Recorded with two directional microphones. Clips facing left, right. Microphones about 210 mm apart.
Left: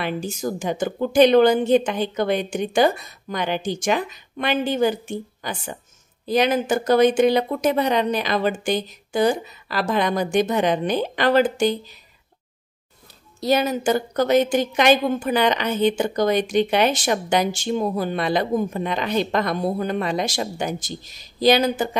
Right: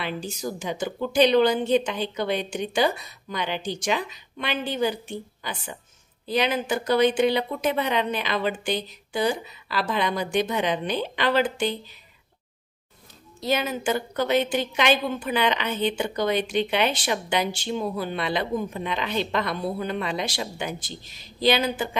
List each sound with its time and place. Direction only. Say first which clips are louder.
0.0 s a woman's voice: left 5 dB; 50° left (ahead or behind)
13.4 s a woman's voice: left 5 dB; 40° left (ahead or behind)